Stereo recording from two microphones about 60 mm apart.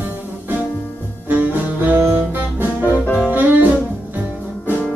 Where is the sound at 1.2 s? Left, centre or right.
Right.